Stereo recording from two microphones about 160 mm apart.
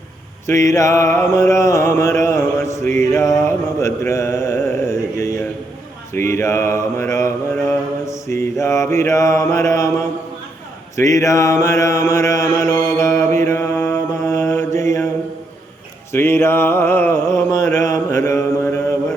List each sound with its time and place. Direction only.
0.4 s mantra: 20° left (ahead or behind)
10.9 s speech: 20° left (ahead or behind)
11.6 s mantra: 20° left (ahead or behind)
16.1 s a sound: 15° left (ahead or behind)